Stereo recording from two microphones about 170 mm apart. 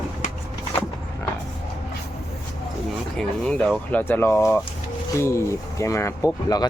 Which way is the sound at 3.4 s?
5° left (ahead or behind).